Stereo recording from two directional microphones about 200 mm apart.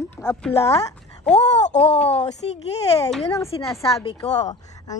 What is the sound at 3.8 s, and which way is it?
Speech, 30° left (ahead or behind).